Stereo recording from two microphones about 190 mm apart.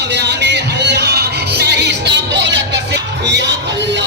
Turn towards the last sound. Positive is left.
turn(degrees=-65)  # may be behind; listen again after turning